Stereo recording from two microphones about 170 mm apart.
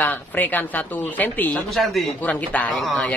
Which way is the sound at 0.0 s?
10° left (ahead or behind).